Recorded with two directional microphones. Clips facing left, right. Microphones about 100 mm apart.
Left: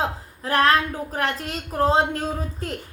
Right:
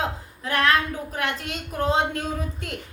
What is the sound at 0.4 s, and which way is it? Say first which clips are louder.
Speech: left 3 dB; 35° left (ahead or behind).